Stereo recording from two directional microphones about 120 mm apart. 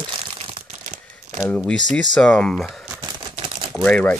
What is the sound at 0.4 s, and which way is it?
Crumpling, 50° right (ahead or behind).